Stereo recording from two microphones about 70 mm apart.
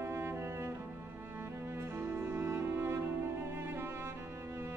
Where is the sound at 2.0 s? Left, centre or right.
Right.